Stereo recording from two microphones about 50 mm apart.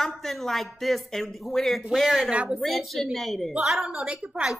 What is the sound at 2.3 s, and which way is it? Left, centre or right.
Speech, right.